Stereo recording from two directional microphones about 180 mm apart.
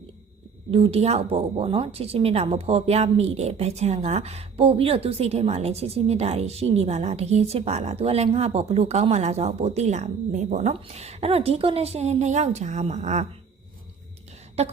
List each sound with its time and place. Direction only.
0.7 s a woman's voice: 35° right (ahead or behind)